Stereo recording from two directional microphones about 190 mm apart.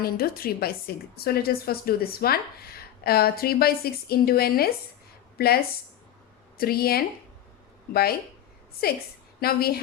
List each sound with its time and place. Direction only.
0.0 s a woman's voice: 50° left (ahead or behind)
9.4 s a woman's voice: 55° left (ahead or behind)